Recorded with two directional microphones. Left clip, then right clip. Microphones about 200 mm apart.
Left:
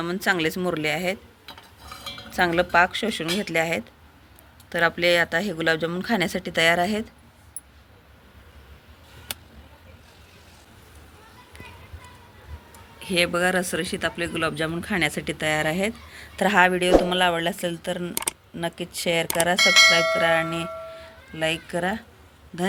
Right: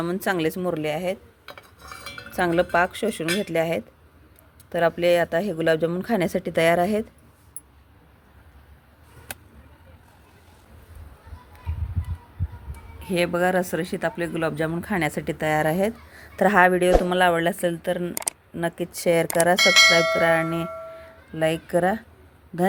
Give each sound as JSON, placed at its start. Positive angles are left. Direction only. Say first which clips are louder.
{"t": 0.0, "sound": "speech", "louder": "left 1 dB", "side_deg": -25}
{"t": 2.3, "sound": "speech", "louder": "left 1 dB", "side_deg": -25}
{"t": 13.0, "sound": "speech", "louder": "left 1 dB", "side_deg": -30}
{"t": 19.5, "sound": "speech", "louder": "left 1 dB", "side_deg": 0}
{"t": 20.2, "sound": "speech", "louder": "right 1 dB", "side_deg": -20}
{"t": 21.3, "sound": "speech", "louder": "right 3 dB", "side_deg": -35}